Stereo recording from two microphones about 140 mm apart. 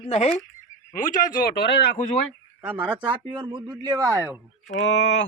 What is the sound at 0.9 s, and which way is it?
Speech, 70° left (ahead or behind).